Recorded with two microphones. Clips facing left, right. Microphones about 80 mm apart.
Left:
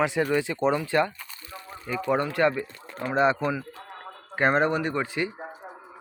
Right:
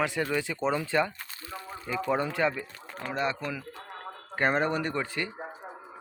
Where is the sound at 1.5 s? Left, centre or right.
Centre.